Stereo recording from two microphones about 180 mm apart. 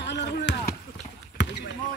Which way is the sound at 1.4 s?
85° left.